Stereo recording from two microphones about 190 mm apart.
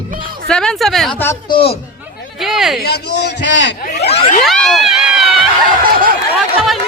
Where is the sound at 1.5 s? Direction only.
30° left (ahead or behind).